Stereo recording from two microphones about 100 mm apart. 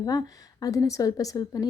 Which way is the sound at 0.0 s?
40° left (ahead or behind).